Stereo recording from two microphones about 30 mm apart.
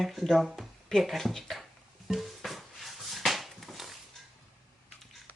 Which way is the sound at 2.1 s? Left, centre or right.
Centre.